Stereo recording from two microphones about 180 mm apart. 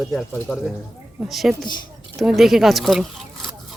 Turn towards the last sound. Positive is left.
turn(degrees=0)  # may be behind; listen again after turning